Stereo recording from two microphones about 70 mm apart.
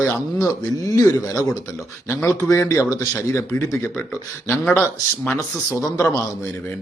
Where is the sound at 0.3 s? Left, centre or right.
Left.